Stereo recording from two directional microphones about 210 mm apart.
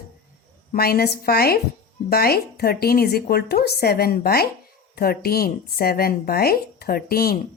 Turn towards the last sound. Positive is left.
turn(degrees=45)  # may be behind; listen again after turning